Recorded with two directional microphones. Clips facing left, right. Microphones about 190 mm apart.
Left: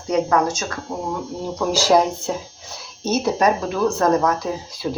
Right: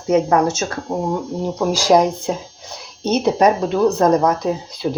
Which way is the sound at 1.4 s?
15° right (ahead or behind).